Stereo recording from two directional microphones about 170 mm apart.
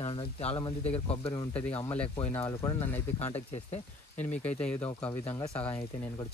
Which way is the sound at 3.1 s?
40° left (ahead or behind).